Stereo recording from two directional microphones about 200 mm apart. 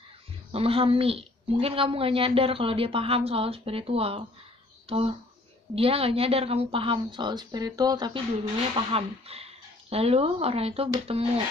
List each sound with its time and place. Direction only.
0.5 s speech: 30° right (ahead or behind)